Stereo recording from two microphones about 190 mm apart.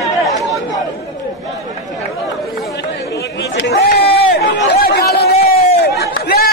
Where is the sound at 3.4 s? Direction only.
65° left (ahead or behind).